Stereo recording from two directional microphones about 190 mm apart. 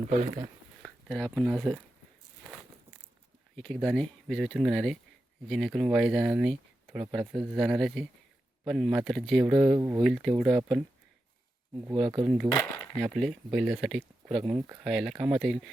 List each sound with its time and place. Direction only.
0.0 s speech: 35° right (ahead or behind)
0.8 s speech: centre (ahead or behind)
3.5 s speech: centre (ahead or behind); by 10.0 s 15° right (ahead or behind)
10.0 s speech: centre (ahead or behind)
11.9 s speech: centre (ahead or behind)
12.5 s a sound: 10° left (ahead or behind)
13.0 s speech: 5° right (ahead or behind)